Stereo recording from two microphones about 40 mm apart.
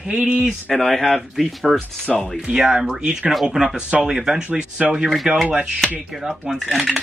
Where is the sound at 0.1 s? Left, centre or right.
Right.